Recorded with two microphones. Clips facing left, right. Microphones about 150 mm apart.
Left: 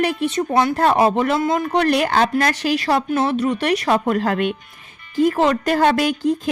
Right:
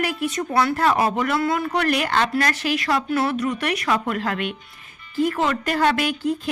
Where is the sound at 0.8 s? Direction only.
35° left (ahead or behind).